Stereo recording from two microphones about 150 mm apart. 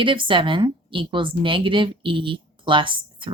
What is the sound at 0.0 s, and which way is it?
A woman's voice, 35° right (ahead or behind).